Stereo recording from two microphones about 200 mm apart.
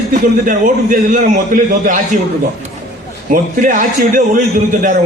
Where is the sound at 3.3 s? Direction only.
40° right (ahead or behind).